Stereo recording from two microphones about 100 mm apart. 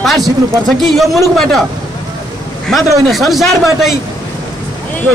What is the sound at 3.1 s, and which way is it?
Speech, centre (ahead or behind).